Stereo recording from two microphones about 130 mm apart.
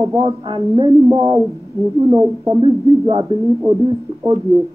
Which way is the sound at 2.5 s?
40° right (ahead or behind).